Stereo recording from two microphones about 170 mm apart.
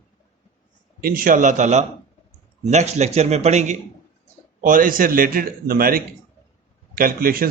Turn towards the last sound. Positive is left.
turn(degrees=-60)  # may be behind; listen again after turning